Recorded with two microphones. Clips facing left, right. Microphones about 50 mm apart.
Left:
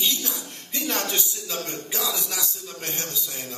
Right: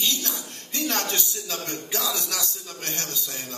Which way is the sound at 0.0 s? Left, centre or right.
Left.